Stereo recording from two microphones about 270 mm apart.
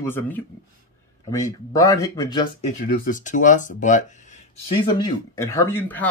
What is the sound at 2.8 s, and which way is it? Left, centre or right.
Speech, left.